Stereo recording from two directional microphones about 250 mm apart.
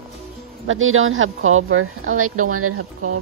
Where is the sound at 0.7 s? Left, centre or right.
Right.